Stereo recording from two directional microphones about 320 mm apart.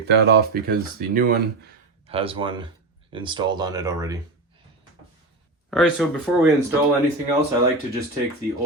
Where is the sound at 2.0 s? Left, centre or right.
Centre.